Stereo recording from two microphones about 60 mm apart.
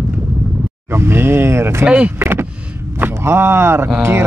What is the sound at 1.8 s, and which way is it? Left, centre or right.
Speech, centre.